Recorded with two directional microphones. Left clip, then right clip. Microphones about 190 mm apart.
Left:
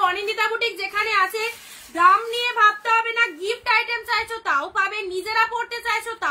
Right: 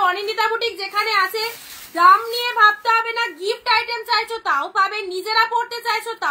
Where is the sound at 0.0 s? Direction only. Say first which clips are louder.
Right 2 dB; 20° left (ahead or behind).